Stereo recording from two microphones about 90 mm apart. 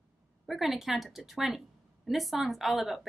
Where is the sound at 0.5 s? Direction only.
Centre (ahead or behind).